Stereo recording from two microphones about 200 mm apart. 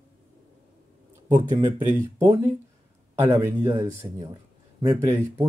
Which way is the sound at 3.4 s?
15° right (ahead or behind).